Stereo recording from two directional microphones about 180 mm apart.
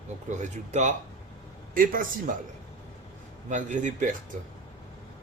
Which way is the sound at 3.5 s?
45° right (ahead or behind).